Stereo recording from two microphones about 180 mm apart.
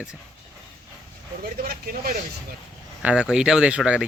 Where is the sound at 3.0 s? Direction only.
5° right (ahead or behind).